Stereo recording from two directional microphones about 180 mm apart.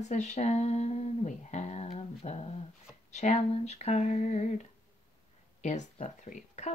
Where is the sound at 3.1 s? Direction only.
40° left (ahead or behind).